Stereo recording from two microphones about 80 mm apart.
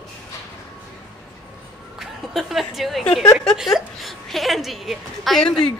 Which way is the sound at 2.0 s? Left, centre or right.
Centre.